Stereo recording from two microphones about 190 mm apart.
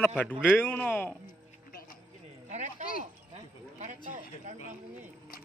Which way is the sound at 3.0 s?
40° right (ahead or behind).